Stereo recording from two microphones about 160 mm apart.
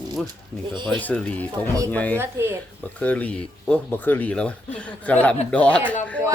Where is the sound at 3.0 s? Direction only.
10° left (ahead or behind).